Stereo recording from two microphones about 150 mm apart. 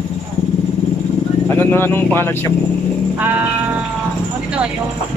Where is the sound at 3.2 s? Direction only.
10° right (ahead or behind).